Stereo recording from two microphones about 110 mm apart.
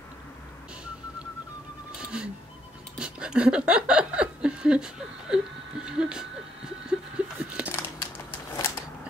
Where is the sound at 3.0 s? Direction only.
10° right (ahead or behind).